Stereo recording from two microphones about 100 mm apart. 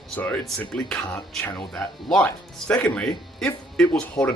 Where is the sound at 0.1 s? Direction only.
15° left (ahead or behind).